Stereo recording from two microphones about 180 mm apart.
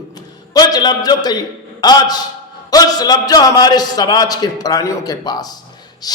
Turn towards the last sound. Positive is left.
turn(degrees=20)  # may be behind; listen again after turning